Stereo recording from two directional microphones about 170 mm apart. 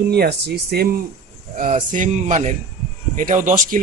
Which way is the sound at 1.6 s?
45° right (ahead or behind).